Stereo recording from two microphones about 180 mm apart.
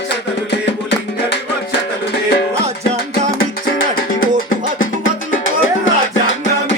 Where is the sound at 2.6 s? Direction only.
35° right (ahead or behind).